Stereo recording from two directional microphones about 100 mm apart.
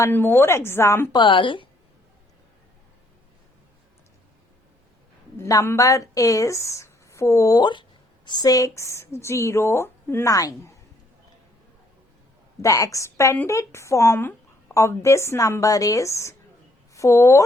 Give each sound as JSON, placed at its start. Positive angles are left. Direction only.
{"t": 0.1, "sound": "speech", "side_deg": 20}
{"t": 1.1, "sound": "speech", "side_deg": 55}
{"t": 5.4, "sound": "a woman's voice", "side_deg": 30}
{"t": 7.6, "sound": "a woman's voice", "side_deg": 50}
{"t": 12.6, "sound": "a woman's voice", "side_deg": 35}